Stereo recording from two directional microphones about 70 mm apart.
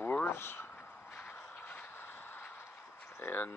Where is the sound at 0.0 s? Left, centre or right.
Left.